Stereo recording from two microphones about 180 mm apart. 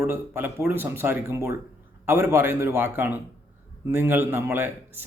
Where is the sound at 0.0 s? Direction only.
10° right (ahead or behind).